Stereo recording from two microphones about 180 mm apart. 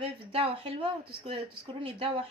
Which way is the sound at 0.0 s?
30° right (ahead or behind).